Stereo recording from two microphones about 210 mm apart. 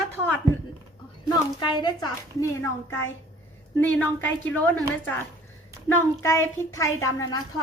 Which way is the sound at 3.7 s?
10° left (ahead or behind).